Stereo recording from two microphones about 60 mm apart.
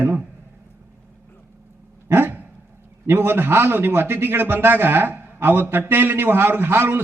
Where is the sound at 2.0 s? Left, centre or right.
Right.